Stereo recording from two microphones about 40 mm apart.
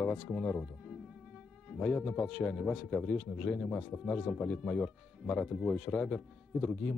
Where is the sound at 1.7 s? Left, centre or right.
Centre.